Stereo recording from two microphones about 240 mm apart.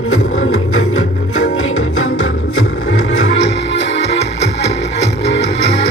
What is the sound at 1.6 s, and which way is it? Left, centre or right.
Music, left.